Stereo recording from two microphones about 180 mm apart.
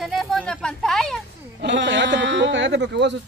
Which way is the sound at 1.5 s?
75° right (ahead or behind).